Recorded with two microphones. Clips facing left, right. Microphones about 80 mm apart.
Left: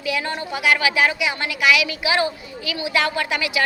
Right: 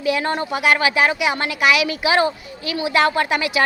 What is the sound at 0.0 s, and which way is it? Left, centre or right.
A woman's voice, right.